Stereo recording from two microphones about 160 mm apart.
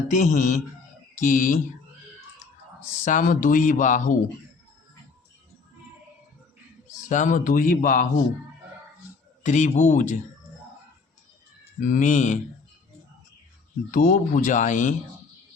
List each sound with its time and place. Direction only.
0.1 s speech: 50° left (ahead or behind)
3.0 s speech: 55° left (ahead or behind)
7.1 s speech: 50° left (ahead or behind)
9.4 s speech: 45° left (ahead or behind)
11.8 s speech: 50° left (ahead or behind)
13.9 s speech: 55° left (ahead or behind)